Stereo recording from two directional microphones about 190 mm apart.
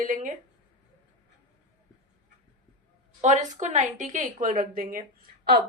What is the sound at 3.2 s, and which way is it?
A woman's voice, 40° right (ahead or behind).